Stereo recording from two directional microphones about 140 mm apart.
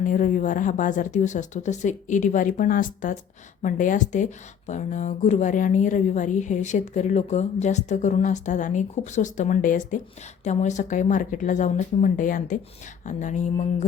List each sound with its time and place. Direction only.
0.0 s speech: 65° left (ahead or behind)